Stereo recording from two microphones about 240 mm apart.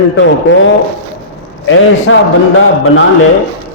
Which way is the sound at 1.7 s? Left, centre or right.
Left.